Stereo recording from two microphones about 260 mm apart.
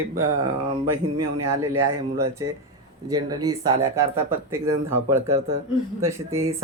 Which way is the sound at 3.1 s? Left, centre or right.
Centre.